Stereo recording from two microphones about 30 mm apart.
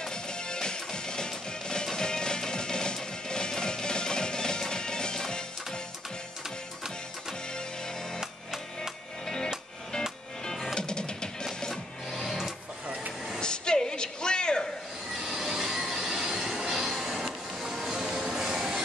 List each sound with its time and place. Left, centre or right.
0.0 s music: left
8.2 s music: centre
9.2 s music: centre
10.5 s music: centre
10.8 s music: left
11.7 s music: centre
13.4 s a sound: left
15.2 s vehicle: centre
16.3 s train: centre
16.6 s music: centre
18.3 s train: centre